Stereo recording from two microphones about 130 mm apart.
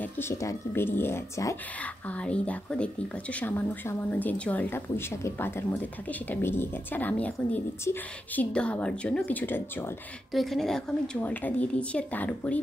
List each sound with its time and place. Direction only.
0.0 s speech: 20° left (ahead or behind)
1.8 s a woman's voice: 10° left (ahead or behind)
10.3 s a woman's voice: centre (ahead or behind)